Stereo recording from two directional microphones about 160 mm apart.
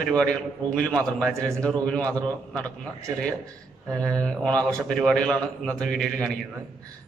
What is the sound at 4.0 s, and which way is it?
A man's voice, 5° left (ahead or behind).